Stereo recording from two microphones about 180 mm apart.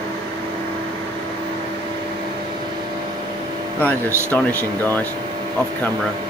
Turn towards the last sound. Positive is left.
turn(degrees=10)  # may be behind; listen again after turning